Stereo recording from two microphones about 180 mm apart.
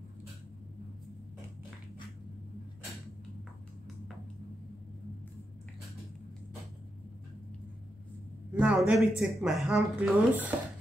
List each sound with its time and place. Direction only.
8.5 s speech: 5° right (ahead or behind)